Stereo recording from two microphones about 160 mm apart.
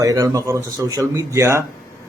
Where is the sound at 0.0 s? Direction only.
20° right (ahead or behind).